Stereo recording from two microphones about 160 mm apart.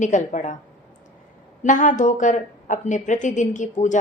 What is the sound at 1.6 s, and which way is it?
A woman's voice, 50° left (ahead or behind).